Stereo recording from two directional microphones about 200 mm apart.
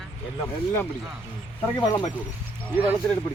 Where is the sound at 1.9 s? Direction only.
20° left (ahead or behind).